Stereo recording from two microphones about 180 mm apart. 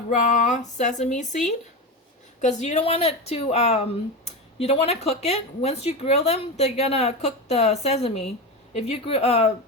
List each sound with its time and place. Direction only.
0.1 s speech: 45° left (ahead or behind)